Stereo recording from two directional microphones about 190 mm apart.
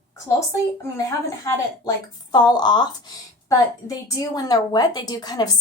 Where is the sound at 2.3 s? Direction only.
20° left (ahead or behind).